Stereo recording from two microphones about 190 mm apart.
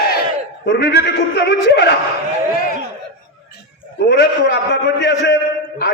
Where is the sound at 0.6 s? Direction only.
60° left (ahead or behind).